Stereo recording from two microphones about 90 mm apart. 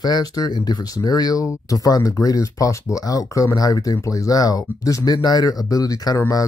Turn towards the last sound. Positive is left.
turn(degrees=40)  # may be behind; listen again after turning